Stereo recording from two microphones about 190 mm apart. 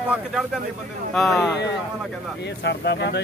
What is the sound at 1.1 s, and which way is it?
Speech, centre (ahead or behind).